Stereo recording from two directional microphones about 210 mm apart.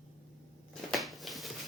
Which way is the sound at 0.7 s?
Centre (ahead or behind).